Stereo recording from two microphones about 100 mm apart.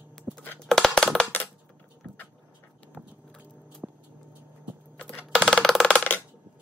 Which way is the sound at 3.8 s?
15° right (ahead or behind).